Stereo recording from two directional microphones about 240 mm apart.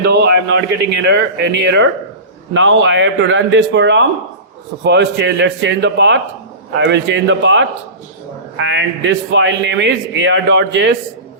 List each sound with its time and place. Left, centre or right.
0.0 s a man's voice: right